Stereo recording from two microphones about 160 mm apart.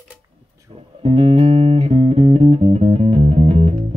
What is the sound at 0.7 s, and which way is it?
Music, 40° right (ahead or behind).